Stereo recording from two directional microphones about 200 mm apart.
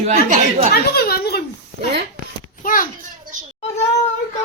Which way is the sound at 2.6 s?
45° left (ahead or behind).